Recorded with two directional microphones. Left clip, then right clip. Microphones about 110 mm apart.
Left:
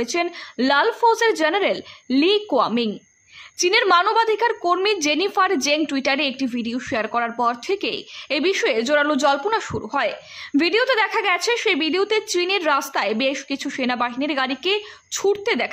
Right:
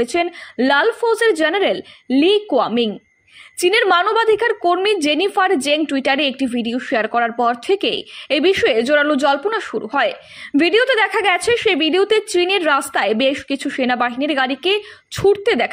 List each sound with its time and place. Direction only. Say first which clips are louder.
0.0 s a woman's voice: right 4 dB; 20° right (ahead or behind)